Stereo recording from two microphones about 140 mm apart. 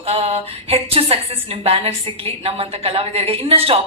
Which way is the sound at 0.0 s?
45° right (ahead or behind).